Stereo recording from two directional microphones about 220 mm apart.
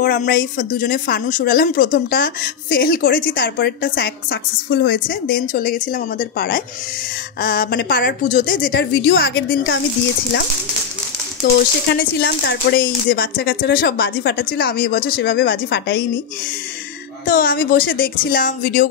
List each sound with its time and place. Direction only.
0.0 s speech: 40° left (ahead or behind)
11.9 s speech: 50° left (ahead or behind)
17.3 s speech: 40° left (ahead or behind)